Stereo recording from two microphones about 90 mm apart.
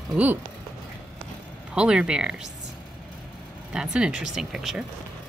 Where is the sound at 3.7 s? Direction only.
10° right (ahead or behind).